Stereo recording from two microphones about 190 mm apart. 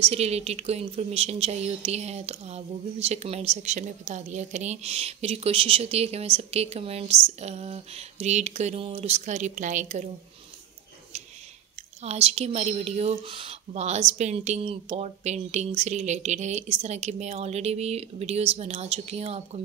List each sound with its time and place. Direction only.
0.0 s speech: 35° right (ahead or behind)
12.0 s speech: 35° right (ahead or behind)